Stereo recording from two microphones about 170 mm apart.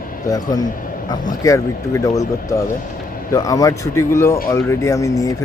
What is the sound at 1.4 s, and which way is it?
Speech, 20° left (ahead or behind).